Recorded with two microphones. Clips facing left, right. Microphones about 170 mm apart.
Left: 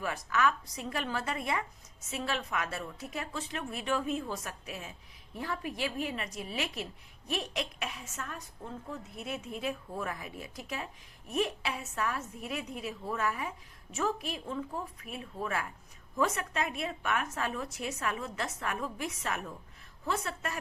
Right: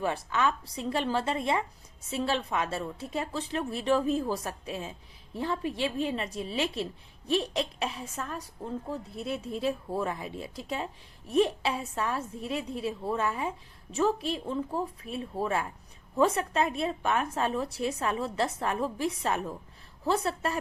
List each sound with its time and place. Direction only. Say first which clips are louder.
0.0 s a woman's voice: right 2 dB; 30° right (ahead or behind)